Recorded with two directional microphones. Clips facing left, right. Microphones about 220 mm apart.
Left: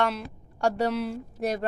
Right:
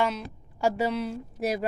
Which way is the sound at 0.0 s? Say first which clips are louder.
Even; centre (ahead or behind).